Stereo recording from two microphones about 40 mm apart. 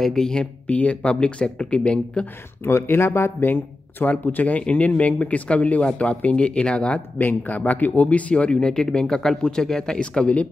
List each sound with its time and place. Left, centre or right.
0.0 s speech: centre
0.7 s speech: left
2.6 s speech: left
3.4 s speech: left
4.5 s speech: left
7.2 s speech: left